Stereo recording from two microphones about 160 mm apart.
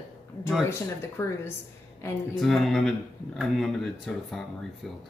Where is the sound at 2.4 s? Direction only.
Centre (ahead or behind).